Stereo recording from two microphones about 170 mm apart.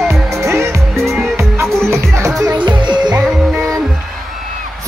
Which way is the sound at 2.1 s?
20° right (ahead or behind).